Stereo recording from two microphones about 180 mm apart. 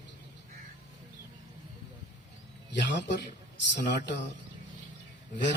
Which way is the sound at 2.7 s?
75° left (ahead or behind).